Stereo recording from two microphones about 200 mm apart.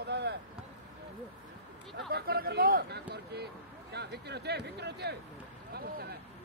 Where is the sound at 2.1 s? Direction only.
50° right (ahead or behind).